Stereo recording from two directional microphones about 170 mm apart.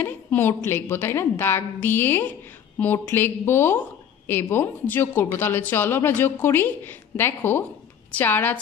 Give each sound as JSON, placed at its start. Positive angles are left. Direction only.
{"t": 0.0, "sound": "a woman's voice", "side_deg": 10}